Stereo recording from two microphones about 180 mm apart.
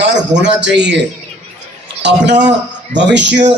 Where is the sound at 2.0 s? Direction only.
75° right (ahead or behind).